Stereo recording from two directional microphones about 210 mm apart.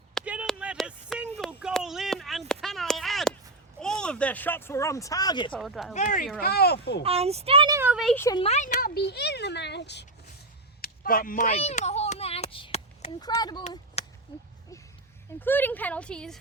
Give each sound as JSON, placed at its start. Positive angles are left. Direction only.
{"t": 0.1, "sound": "a sound", "side_deg": 0}
{"t": 3.8, "sound": "speech", "side_deg": 5}
{"t": 5.5, "sound": "speech", "side_deg": 0}
{"t": 5.9, "sound": "speech", "side_deg": 40}
{"t": 6.4, "sound": "a child's voice", "side_deg": 50}
{"t": 7.0, "sound": "speech", "side_deg": -30}
{"t": 7.8, "sound": "speech", "side_deg": -5}
{"t": 8.1, "sound": "a woman's voice", "side_deg": 10}
{"t": 8.4, "sound": "speech", "side_deg": 30}
{"t": 8.7, "sound": "a child's voice", "side_deg": 50}
{"t": 10.8, "sound": "a sound", "side_deg": 45}
{"t": 13.2, "sound": "speech", "side_deg": 20}
{"t": 14.0, "sound": "a sound", "side_deg": 30}
{"t": 15.4, "sound": "a woman's voice", "side_deg": 10}